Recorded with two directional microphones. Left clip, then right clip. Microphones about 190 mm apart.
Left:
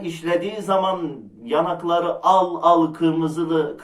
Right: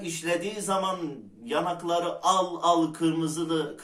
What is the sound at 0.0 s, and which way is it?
A man's voice, 10° right (ahead or behind).